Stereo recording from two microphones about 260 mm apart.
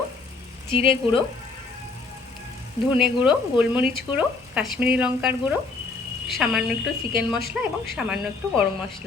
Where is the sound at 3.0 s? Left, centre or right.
Centre.